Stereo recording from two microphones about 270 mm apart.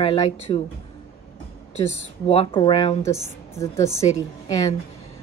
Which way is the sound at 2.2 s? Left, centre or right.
Left.